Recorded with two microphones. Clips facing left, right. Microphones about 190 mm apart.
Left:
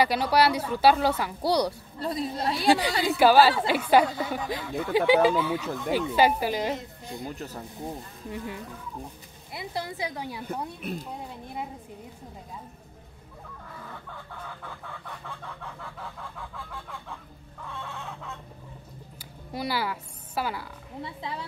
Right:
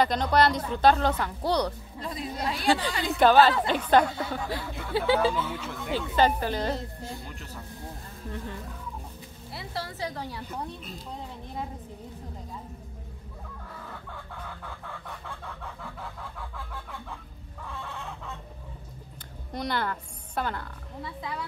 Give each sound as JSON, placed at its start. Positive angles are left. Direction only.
{"t": 0.0, "sound": "speech", "side_deg": 10}
{"t": 2.0, "sound": "a woman's voice", "side_deg": 35}
{"t": 3.1, "sound": "speech", "side_deg": 5}
{"t": 7.2, "sound": "speech", "side_deg": 40}
{"t": 9.5, "sound": "speech", "side_deg": 15}
{"t": 10.4, "sound": "speech", "side_deg": 60}
{"t": 19.5, "sound": "a woman's voice", "side_deg": 5}
{"t": 21.0, "sound": "speech", "side_deg": 25}